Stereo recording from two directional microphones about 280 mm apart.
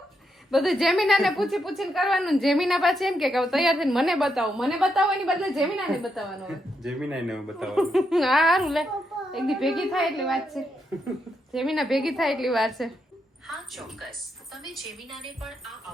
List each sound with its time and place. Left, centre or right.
0.5 s a woman's voice: centre